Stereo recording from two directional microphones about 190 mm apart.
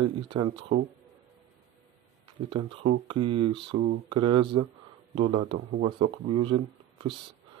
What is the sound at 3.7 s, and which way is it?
Speech, 60° right (ahead or behind).